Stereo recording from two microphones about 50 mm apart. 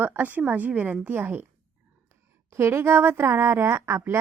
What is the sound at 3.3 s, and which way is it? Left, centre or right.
Speech, right.